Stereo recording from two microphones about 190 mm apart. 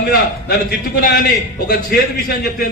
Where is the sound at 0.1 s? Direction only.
55° left (ahead or behind).